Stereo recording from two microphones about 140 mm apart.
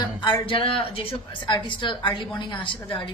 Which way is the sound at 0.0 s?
30° left (ahead or behind).